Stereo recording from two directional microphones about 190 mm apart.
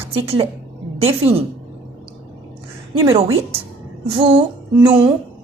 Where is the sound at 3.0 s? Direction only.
30° right (ahead or behind).